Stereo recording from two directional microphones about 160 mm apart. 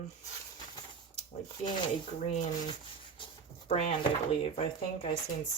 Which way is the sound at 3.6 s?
40° left (ahead or behind).